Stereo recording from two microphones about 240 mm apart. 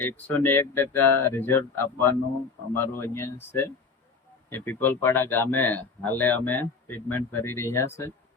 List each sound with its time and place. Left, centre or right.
0.0 s speech: centre